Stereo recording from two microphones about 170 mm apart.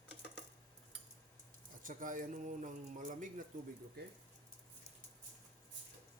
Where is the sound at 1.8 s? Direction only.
50° right (ahead or behind).